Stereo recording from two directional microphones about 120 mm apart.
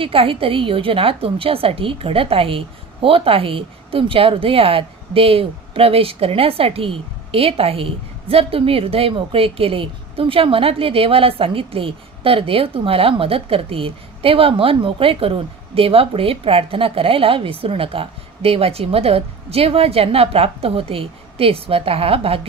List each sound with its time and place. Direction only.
0.0 s a woman's voice: 50° right (ahead or behind)